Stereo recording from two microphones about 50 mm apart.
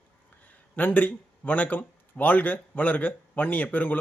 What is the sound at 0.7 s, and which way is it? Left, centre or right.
Speech, left.